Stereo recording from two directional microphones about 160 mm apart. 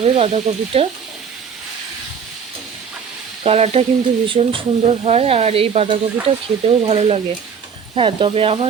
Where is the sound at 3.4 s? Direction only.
40° right (ahead or behind).